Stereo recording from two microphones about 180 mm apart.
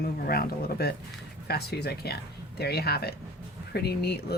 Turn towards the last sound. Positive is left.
turn(degrees=60)  # may be behind; listen again after turning